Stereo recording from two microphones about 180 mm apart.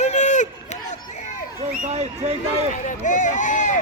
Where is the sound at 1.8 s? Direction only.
35° right (ahead or behind).